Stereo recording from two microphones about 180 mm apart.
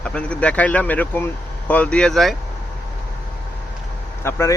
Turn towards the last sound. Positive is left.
turn(degrees=15)  # may be behind; listen again after turning